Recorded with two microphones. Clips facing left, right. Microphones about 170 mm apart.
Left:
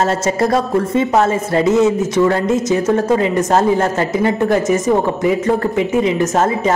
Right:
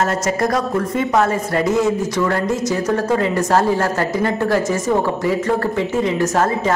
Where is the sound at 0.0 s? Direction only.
25° left (ahead or behind).